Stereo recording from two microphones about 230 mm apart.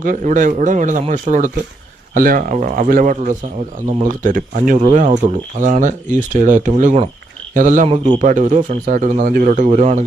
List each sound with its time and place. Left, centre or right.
0.0 s speech: right